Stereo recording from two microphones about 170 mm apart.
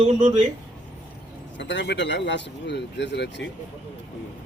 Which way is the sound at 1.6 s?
90° left.